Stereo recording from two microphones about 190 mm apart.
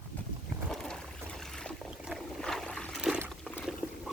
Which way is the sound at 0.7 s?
5° left (ahead or behind).